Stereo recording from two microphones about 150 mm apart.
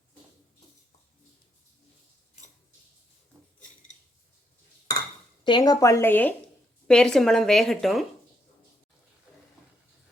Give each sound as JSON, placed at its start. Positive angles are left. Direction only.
{"t": 5.5, "sound": "a woman's voice", "side_deg": 30}